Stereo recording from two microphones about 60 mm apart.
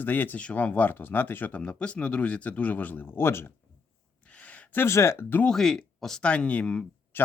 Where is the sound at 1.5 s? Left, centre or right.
Centre; by 3.5 s left.